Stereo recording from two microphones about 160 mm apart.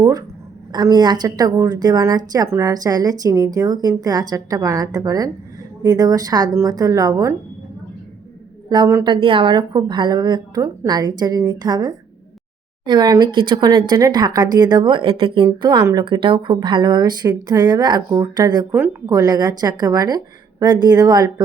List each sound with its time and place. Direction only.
0.0 s a woman's voice: 20° right (ahead or behind)
8.7 s a woman's voice: 25° right (ahead or behind)